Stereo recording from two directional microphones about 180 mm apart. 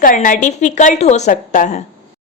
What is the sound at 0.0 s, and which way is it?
A woman's voice, 50° left (ahead or behind).